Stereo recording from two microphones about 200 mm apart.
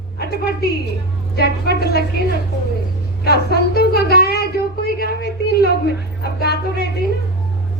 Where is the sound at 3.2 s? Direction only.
50° left (ahead or behind).